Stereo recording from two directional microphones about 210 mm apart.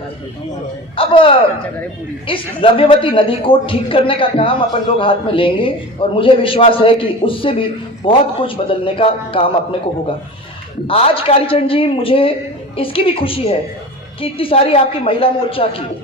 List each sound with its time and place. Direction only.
0.9 s a man's voice: 25° left (ahead or behind)
10.8 s a man's voice: 25° left (ahead or behind)